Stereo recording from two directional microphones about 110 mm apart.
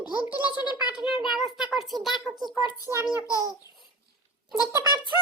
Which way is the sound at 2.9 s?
30° right (ahead or behind).